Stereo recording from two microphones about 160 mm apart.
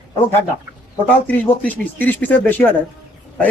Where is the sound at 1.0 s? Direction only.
10° left (ahead or behind).